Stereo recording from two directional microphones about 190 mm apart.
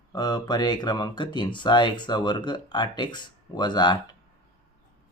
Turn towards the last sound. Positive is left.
turn(degrees=25)  # may be behind; listen again after turning